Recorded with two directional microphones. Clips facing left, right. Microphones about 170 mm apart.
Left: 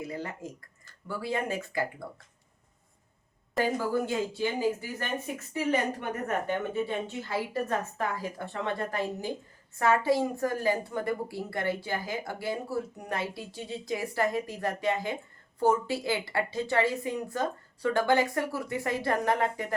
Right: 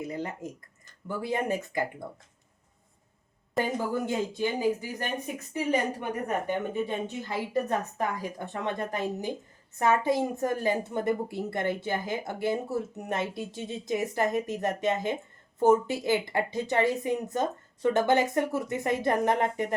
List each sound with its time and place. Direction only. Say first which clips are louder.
0.0 s a woman's voice: right 2 dB; 20° right (ahead or behind)
3.6 s a woman's voice: left 1 dB; 20° right (ahead or behind)